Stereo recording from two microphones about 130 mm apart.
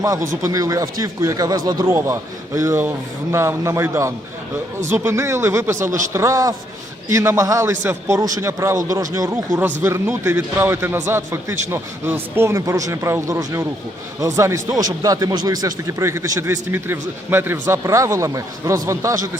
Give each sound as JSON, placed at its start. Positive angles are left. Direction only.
{"t": 0.0, "sound": "speech", "side_deg": -25}